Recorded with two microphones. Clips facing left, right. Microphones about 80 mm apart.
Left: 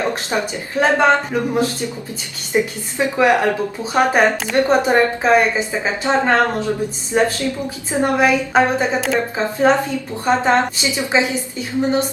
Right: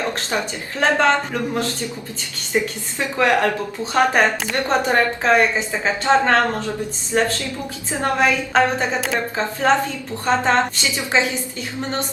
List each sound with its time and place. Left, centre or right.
0.8 s a woman's voice: centre